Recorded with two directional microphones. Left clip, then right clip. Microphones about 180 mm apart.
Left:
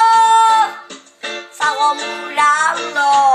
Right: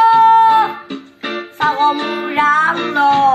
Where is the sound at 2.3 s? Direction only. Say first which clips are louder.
Even; 15° left (ahead or behind).